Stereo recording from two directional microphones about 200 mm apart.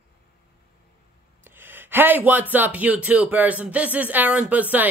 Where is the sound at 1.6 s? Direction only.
10° right (ahead or behind).